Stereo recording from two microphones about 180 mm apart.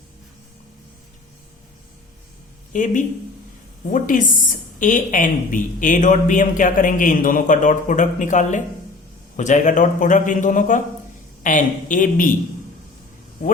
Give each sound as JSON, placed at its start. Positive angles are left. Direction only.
{"t": 2.7, "sound": "speech", "side_deg": 45}